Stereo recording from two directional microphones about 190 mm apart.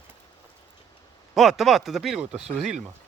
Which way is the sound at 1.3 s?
Centre (ahead or behind).